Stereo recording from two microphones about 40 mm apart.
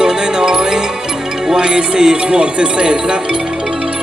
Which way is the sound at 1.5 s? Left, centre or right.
Right.